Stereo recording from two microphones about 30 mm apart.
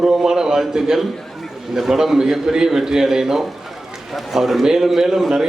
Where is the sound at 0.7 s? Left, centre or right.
Centre.